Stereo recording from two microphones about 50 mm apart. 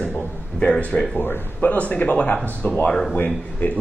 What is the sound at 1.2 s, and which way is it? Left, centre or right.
Speech, left.